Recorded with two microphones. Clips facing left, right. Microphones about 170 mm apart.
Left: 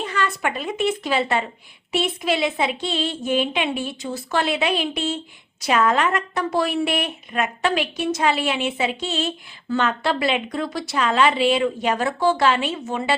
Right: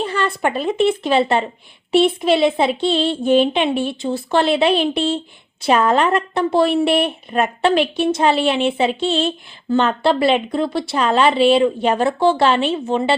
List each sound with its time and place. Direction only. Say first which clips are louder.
0.0 s a woman's voice: right 4 dB; 30° right (ahead or behind)